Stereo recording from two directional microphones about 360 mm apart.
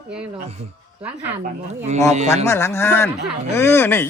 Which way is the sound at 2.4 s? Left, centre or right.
Centre.